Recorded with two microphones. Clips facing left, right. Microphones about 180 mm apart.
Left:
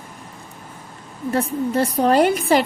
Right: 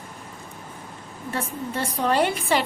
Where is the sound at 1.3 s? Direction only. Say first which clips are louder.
Left 9 dB; 40° left (ahead or behind).